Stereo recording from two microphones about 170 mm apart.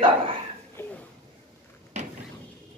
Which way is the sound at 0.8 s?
15° left (ahead or behind).